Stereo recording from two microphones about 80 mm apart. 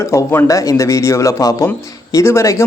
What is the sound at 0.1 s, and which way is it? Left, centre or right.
A man's voice, left.